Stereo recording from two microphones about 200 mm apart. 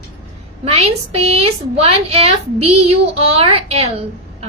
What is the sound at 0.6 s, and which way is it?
A woman's voice, 30° right (ahead or behind).